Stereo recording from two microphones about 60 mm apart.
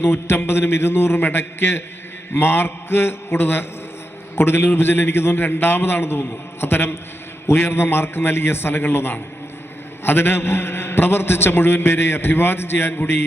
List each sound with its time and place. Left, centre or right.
0.0 s a man's voice: left